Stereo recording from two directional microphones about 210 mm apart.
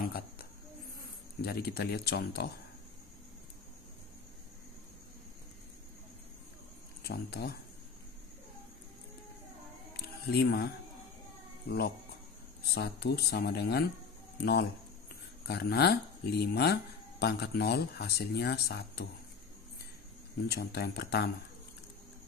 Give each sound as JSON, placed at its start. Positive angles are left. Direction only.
{"t": 0.0, "sound": "a sound", "side_deg": 45}
{"t": 1.4, "sound": "speech", "side_deg": 50}
{"t": 7.0, "sound": "speech", "side_deg": 50}
{"t": 9.9, "sound": "a sound", "side_deg": 50}
{"t": 12.6, "sound": "speech", "side_deg": 50}
{"t": 20.4, "sound": "speech", "side_deg": 50}